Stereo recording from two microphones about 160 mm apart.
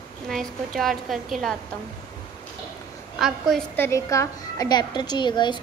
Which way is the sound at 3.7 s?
15° left (ahead or behind).